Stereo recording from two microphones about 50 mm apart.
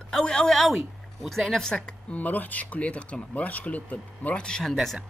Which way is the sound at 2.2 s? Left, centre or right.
Left.